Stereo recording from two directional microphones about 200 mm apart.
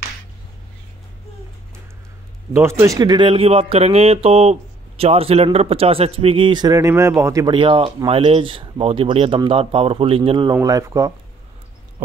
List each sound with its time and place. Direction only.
2.5 s speech: 15° right (ahead or behind)